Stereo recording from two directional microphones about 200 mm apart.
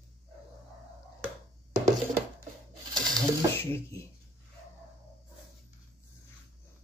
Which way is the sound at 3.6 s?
10° left (ahead or behind).